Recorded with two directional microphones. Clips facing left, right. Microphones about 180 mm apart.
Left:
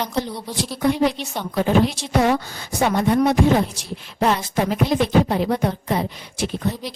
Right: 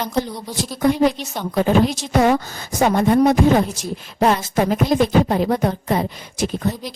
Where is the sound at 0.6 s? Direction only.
45° right (ahead or behind).